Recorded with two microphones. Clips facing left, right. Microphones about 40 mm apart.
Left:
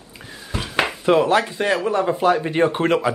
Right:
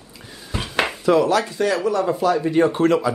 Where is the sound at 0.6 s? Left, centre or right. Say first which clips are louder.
Left 1 dB; centre.